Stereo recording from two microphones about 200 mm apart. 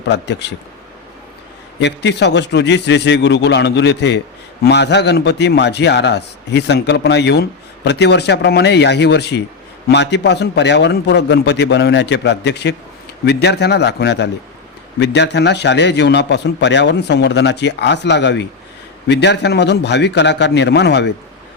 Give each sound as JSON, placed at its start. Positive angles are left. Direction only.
{"t": 0.1, "sound": "a man's voice", "side_deg": 60}
{"t": 1.8, "sound": "a man's voice", "side_deg": 60}